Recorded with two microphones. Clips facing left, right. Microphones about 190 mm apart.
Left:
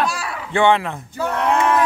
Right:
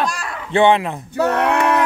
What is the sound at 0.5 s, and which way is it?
Speech, 20° right (ahead or behind).